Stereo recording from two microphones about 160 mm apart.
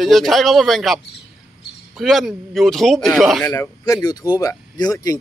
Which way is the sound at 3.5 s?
20° left (ahead or behind).